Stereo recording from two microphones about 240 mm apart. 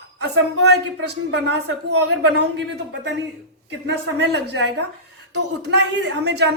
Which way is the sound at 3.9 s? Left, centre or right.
Right.